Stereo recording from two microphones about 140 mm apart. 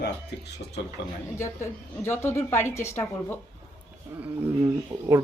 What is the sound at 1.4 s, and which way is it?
A woman's voice, 20° left (ahead or behind).